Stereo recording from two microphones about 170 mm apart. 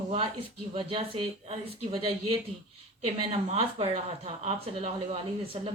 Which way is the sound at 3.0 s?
40° right (ahead or behind).